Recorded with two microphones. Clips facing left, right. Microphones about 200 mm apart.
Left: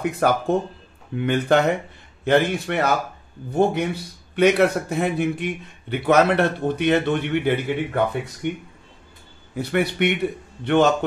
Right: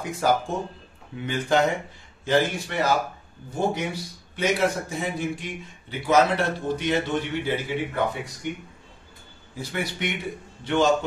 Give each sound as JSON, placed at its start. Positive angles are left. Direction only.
{"t": 0.1, "sound": "a man's voice", "side_deg": 60}